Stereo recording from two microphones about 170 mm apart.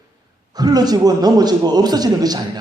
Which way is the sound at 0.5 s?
25° right (ahead or behind).